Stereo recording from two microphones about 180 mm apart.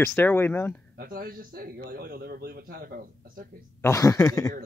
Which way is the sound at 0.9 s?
55° right (ahead or behind).